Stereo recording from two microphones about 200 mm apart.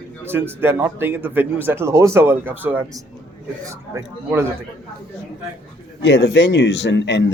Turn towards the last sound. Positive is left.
turn(degrees=65)  # may be behind; listen again after turning